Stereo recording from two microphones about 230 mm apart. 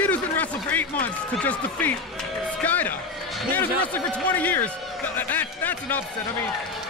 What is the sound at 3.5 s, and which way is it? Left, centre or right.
Speech, centre.